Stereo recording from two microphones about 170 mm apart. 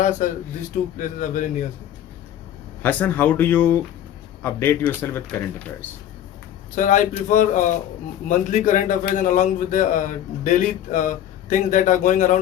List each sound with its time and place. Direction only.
0.2 s a man's voice: 50° left (ahead or behind)
2.8 s speech: 10° left (ahead or behind)
6.7 s a man's voice: 50° left (ahead or behind)